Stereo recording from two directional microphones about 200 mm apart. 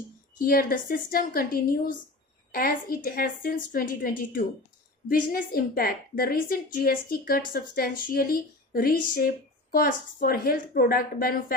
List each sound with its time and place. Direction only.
0.4 s a woman's voice: 45° left (ahead or behind)